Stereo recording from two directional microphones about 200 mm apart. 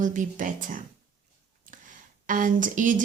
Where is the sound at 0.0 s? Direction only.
40° right (ahead or behind).